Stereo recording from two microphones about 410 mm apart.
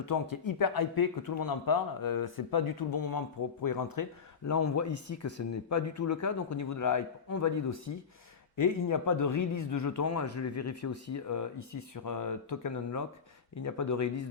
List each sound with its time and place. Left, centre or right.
0.0 s speech: left
4.4 s speech: left